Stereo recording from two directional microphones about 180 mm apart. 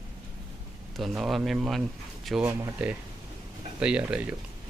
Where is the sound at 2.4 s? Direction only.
15° right (ahead or behind).